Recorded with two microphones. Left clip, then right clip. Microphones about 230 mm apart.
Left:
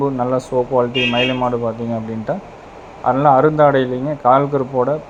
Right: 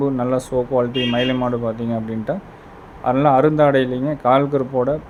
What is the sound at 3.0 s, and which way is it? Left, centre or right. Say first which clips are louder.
A man's voice: left 2 dB; centre.